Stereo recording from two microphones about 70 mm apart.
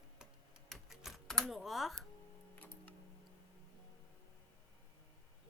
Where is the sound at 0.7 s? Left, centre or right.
Centre.